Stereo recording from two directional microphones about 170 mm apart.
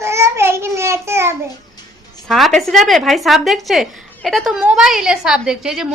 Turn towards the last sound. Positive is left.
turn(degrees=0)  # may be behind; listen again after turning